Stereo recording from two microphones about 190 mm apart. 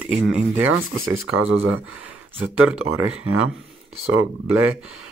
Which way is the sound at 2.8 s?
90° right.